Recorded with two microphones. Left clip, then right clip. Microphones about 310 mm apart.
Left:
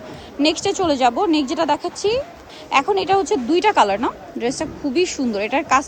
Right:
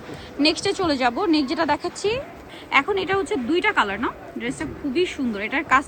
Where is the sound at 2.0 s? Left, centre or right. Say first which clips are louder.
Left 4 dB; left.